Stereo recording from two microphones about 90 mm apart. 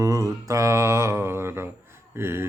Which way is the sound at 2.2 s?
25° right (ahead or behind).